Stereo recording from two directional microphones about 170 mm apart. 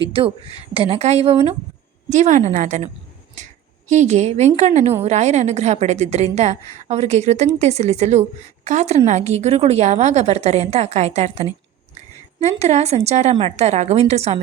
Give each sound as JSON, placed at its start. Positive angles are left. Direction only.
{"t": 0.1, "sound": "a woman's voice", "side_deg": -30}